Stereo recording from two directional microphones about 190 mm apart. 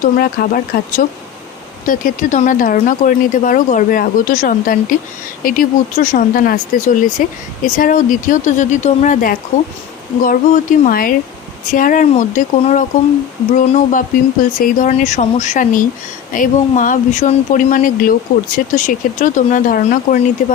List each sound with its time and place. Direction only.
0.0 s speech: 50° left (ahead or behind)